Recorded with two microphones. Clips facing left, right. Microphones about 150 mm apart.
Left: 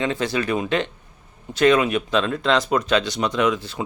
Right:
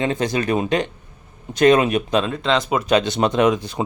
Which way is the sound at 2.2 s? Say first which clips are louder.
Even; centre (ahead or behind).